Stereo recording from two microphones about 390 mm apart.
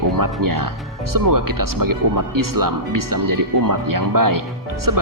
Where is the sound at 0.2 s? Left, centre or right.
Right.